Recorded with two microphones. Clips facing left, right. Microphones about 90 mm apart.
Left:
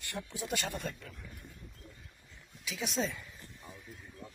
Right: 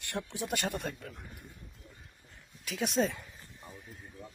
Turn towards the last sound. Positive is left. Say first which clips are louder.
# right 5 dB
turn(degrees=-55)  # may be behind; listen again after turning